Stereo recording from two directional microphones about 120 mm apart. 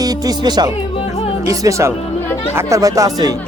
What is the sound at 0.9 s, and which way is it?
Music, 50° left (ahead or behind).